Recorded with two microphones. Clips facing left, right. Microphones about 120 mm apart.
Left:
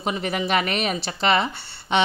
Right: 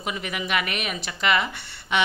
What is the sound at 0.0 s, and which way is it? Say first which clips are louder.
Speech: left 5 dB; 35° left (ahead or behind).